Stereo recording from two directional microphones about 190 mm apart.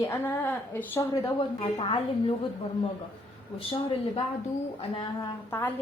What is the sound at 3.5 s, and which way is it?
Speech, 30° left (ahead or behind).